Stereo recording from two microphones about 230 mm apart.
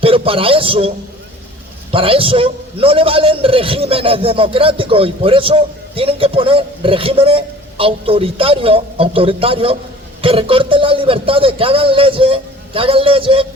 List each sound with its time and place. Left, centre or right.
0.0 s a man's voice: right
1.9 s a man's voice: right